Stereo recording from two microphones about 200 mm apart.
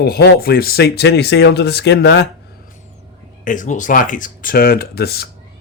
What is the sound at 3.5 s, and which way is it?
Speech, 40° left (ahead or behind).